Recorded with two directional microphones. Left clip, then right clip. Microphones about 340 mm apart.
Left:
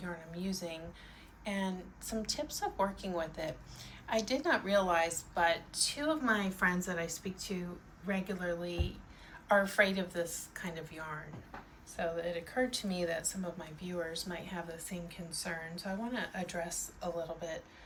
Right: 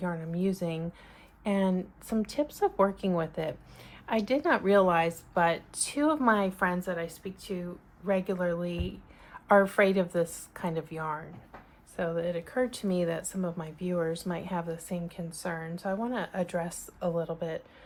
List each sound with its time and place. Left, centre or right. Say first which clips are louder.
0.0 s a woman's voice: right 10 dB; centre
9.5 s a woman's voice: right 6 dB; centre